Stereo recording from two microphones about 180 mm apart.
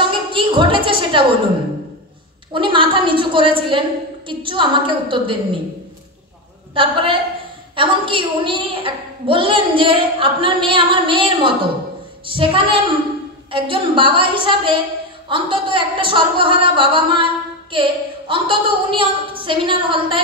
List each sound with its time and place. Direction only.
0.3 s a woman's voice: 30° right (ahead or behind)
2.5 s a woman's voice: 30° right (ahead or behind)
6.7 s a woman's voice: 30° right (ahead or behind)